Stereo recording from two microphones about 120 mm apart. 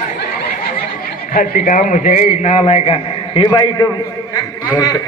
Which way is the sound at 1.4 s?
90° left.